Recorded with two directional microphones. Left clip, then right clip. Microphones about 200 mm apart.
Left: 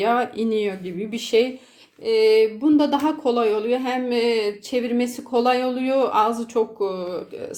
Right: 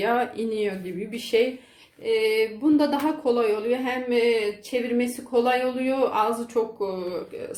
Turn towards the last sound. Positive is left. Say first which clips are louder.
# left 3 dB
turn(degrees=35)  # may be behind; listen again after turning